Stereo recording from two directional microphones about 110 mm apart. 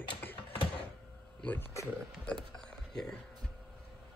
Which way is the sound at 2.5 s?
5° left (ahead or behind).